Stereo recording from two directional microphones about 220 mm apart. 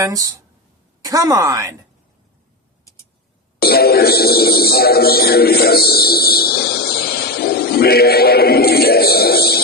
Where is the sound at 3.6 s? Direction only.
45° left (ahead or behind).